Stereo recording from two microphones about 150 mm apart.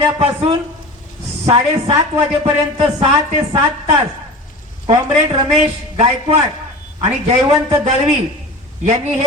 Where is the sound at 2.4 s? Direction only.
40° right (ahead or behind).